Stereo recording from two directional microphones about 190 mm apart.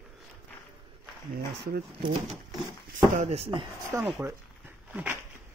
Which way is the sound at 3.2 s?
35° right (ahead or behind).